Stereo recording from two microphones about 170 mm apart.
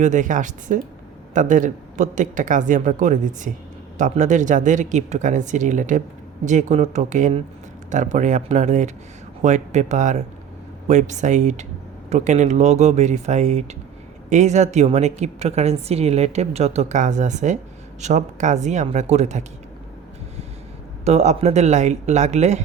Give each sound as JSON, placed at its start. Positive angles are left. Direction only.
{"t": 0.0, "sound": "a woman's voice", "side_deg": -45}
{"t": 21.0, "sound": "speech", "side_deg": -40}